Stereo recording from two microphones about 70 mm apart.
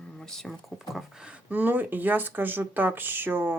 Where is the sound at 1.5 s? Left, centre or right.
Right.